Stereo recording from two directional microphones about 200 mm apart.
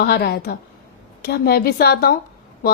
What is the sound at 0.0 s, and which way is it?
A woman's voice, 50° left (ahead or behind).